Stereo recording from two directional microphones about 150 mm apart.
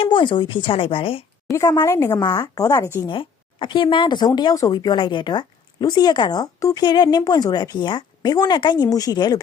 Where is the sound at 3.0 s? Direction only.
35° left (ahead or behind).